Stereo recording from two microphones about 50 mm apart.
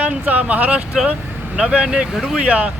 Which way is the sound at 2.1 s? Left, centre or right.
Centre.